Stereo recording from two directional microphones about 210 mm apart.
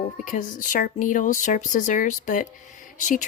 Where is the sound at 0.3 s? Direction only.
40° left (ahead or behind).